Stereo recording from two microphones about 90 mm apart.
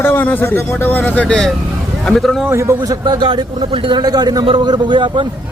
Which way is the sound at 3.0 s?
55° right (ahead or behind).